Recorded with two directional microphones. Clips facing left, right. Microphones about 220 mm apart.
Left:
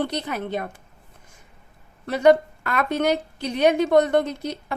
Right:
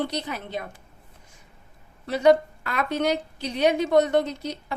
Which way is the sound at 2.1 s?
55° left (ahead or behind).